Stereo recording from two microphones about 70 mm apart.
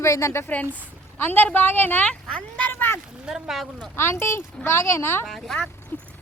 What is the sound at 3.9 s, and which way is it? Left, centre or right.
A woman's voice, left.